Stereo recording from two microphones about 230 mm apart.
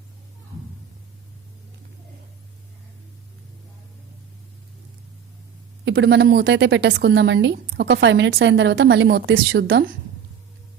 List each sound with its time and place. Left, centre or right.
5.8 s a woman's voice: right